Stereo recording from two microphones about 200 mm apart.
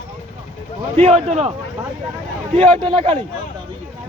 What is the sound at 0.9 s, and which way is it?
Speech, 30° right (ahead or behind).